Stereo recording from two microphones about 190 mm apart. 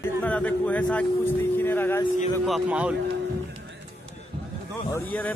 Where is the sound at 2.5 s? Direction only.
5° right (ahead or behind).